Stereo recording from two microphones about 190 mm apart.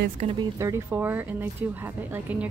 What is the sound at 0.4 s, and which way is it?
A woman's voice, 15° right (ahead or behind).